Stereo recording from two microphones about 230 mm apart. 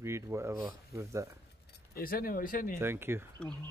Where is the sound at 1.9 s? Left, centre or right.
Left.